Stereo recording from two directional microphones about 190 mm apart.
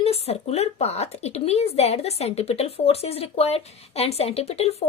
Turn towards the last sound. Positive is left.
turn(degrees=35)  # may be behind; listen again after turning